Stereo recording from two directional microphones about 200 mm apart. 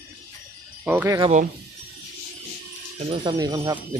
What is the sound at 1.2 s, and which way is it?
Speech, 35° right (ahead or behind).